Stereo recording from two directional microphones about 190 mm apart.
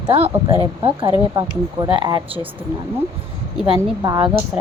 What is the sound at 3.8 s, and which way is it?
Speech, 20° right (ahead or behind).